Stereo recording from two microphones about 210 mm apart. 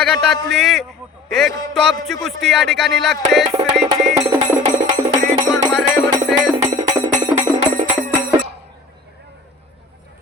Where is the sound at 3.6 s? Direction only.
30° right (ahead or behind).